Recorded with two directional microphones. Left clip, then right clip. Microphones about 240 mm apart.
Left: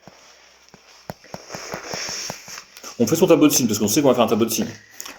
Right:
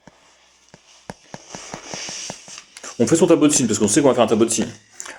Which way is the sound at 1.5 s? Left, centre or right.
Left.